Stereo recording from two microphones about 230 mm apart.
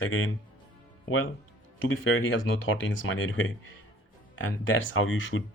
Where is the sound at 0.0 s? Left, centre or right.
Left.